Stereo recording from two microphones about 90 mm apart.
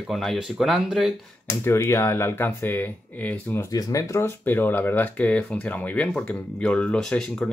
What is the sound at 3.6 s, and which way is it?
Speech, 40° left (ahead or behind).